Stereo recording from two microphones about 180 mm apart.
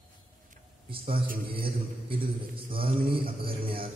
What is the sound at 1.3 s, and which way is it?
Speech, 55° right (ahead or behind).